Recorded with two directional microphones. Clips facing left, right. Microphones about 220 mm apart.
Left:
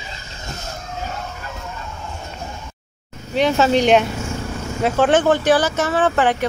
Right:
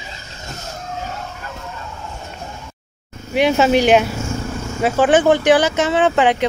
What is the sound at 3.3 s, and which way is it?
Speech, 15° right (ahead or behind).